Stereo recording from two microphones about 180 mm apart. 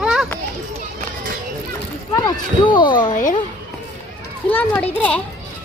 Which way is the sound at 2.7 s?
25° left (ahead or behind).